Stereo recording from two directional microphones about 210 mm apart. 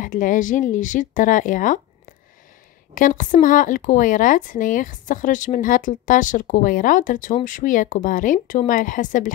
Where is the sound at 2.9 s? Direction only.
40° left (ahead or behind).